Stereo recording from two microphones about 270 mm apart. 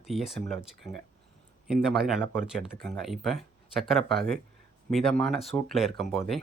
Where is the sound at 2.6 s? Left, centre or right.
Right.